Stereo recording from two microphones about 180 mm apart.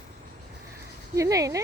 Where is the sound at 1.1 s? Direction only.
20° right (ahead or behind).